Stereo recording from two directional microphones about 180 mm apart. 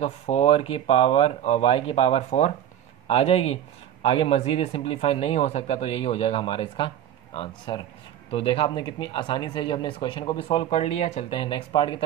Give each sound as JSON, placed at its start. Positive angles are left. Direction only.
{"t": 0.0, "sound": "a man's voice", "side_deg": 35}